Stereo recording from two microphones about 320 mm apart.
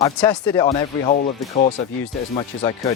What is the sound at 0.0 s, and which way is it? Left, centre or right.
Speech, centre.